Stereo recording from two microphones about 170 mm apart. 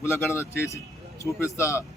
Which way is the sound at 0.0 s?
15° left (ahead or behind).